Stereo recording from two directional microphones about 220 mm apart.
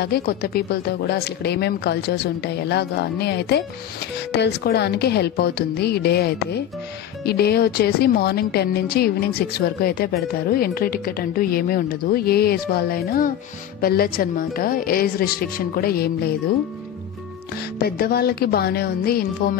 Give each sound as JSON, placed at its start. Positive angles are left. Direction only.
{"t": 0.0, "sound": "speech", "side_deg": 45}
{"t": 17.7, "sound": "speech", "side_deg": 45}